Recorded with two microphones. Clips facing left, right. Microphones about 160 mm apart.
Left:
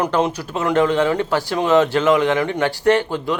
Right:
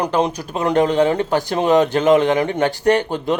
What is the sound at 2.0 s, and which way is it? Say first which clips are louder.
Speech: right 2 dB; 40° right (ahead or behind).